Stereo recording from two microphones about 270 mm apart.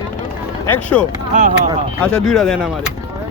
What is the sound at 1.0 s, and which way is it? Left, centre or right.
Speech, centre.